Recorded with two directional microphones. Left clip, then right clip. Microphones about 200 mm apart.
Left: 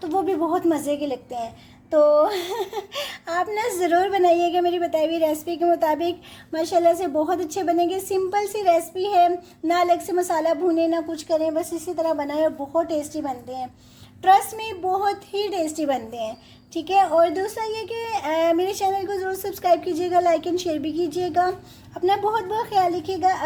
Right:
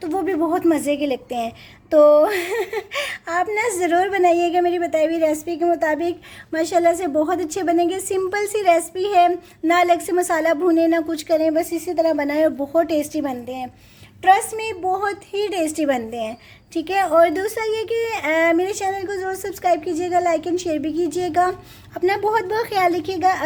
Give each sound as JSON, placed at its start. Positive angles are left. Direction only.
{"t": 0.0, "sound": "a woman's voice", "side_deg": -25}
{"t": 14.2, "sound": "speech", "side_deg": -20}
{"t": 22.3, "sound": "a woman's voice", "side_deg": -35}